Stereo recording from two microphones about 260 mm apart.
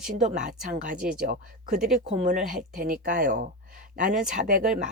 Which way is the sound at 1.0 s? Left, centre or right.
Centre.